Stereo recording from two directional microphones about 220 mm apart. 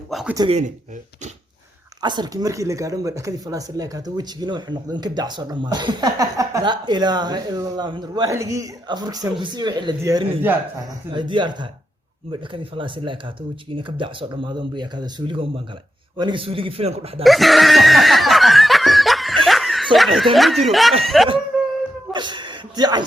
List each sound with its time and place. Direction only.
0.1 s speech: centre (ahead or behind)
0.3 s speech: 25° right (ahead or behind)
2.0 s speech: 20° right (ahead or behind)
17.2 s snicker: centre (ahead or behind)
20.1 s speech: centre (ahead or behind)
22.1 s a sound: 20° right (ahead or behind)